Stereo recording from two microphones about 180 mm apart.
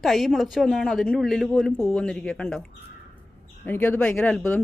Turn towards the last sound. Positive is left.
turn(degrees=10)  # may be behind; listen again after turning